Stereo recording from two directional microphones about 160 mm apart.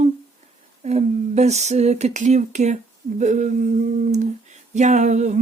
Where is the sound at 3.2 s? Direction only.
50° right (ahead or behind).